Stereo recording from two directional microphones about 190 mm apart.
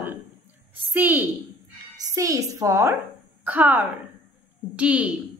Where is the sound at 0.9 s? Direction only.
10° right (ahead or behind).